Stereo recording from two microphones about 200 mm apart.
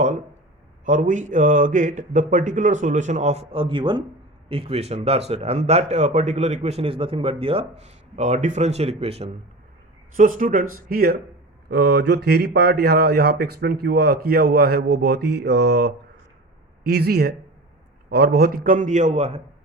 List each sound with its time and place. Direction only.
0.9 s a man's voice: 40° right (ahead or behind)
10.2 s a man's voice: 40° right (ahead or behind)